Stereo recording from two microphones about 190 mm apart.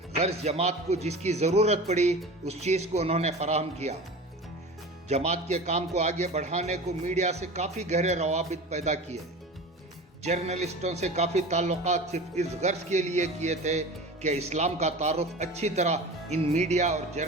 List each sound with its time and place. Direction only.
0.2 s speech: 35° right (ahead or behind)
5.0 s speech: 35° right (ahead or behind)
10.2 s speech: 35° right (ahead or behind)